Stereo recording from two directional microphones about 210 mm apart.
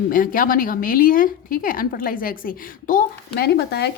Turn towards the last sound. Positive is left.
turn(degrees=50)  # may be behind; listen again after turning